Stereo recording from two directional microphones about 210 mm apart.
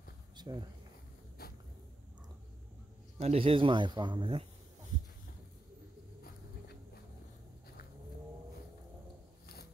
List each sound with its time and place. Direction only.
0.4 s speech: 20° right (ahead or behind)
3.2 s speech: 30° right (ahead or behind)